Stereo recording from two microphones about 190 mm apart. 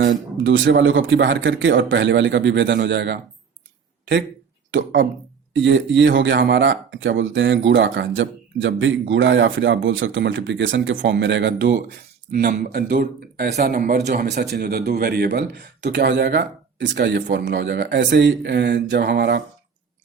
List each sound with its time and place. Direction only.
0.4 s speech: 75° right (ahead or behind)
4.7 s speech: 75° right (ahead or behind)
12.4 s a man's voice: 55° right (ahead or behind)